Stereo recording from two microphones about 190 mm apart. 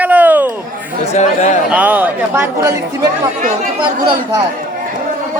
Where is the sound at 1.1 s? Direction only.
35° left (ahead or behind).